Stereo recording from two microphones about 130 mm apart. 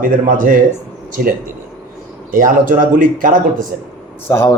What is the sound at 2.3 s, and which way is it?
A man's voice, 90° right.